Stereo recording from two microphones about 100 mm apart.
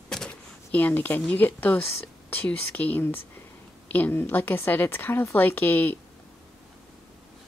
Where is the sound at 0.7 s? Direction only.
20° left (ahead or behind).